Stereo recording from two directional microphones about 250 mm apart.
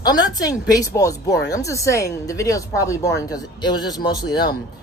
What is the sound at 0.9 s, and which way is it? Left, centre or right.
Speech, centre.